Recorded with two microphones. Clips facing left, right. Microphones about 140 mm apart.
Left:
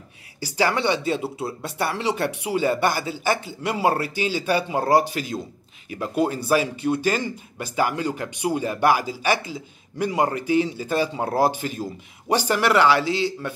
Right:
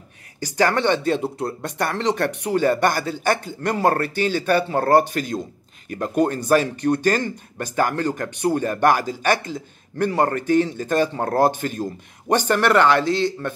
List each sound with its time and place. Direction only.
0.4 s speech: 10° left (ahead or behind)
5.1 s a man's voice: 45° right (ahead or behind)
6.0 s speech: 10° left (ahead or behind)